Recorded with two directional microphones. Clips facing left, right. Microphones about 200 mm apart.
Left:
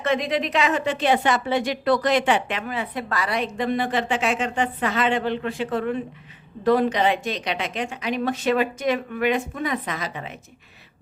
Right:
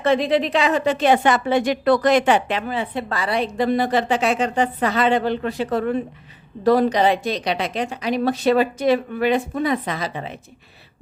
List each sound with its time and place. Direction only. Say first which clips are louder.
0.0 s a woman's voice: right 5 dB; 30° right (ahead or behind)